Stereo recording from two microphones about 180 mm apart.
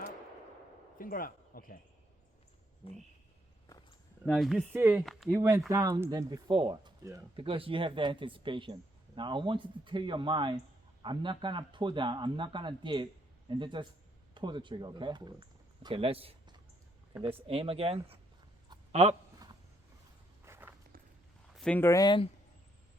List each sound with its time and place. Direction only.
0.9 s speech: 50° left (ahead or behind)
4.3 s speech: centre (ahead or behind)
4.7 s speech: 10° right (ahead or behind)
7.3 s speech: 30° right (ahead or behind)
20.4 s walk: 15° right (ahead or behind)
21.5 s speech: 5° left (ahead or behind); by 22.3 s 25° left (ahead or behind)